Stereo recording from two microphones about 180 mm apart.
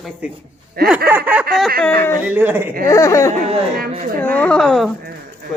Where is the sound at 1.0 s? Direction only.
10° right (ahead or behind).